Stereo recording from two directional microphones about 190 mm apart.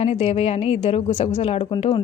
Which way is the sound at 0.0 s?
35° left (ahead or behind).